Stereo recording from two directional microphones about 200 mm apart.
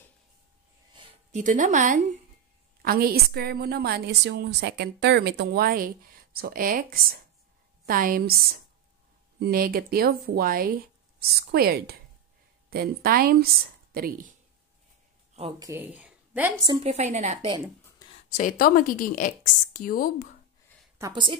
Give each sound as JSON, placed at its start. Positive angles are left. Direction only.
{"t": 1.3, "sound": "a woman's voice", "side_deg": -40}
{"t": 2.8, "sound": "a woman's voice", "side_deg": -50}
{"t": 9.4, "sound": "a woman's voice", "side_deg": -45}
{"t": 15.6, "sound": "a woman's voice", "side_deg": -10}
{"t": 16.6, "sound": "a woman's voice", "side_deg": -30}
{"t": 18.3, "sound": "a woman's voice", "side_deg": 40}
{"t": 21.0, "sound": "a woman's voice", "side_deg": -25}